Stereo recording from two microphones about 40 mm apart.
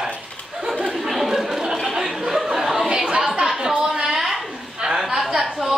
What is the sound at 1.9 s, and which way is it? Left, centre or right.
Chatter, centre.